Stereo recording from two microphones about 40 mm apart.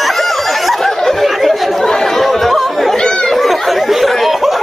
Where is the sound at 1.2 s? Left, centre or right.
Centre.